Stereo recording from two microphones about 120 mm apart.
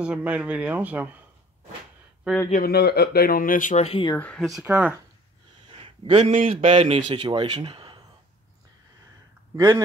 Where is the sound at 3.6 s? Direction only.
65° left (ahead or behind).